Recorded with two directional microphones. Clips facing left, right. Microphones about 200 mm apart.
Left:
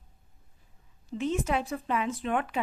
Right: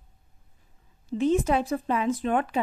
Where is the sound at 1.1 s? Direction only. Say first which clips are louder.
Right 6 dB; 35° right (ahead or behind).